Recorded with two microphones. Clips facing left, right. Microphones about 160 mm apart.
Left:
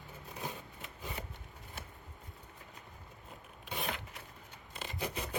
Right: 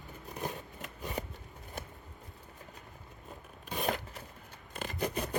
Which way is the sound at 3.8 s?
40° right (ahead or behind).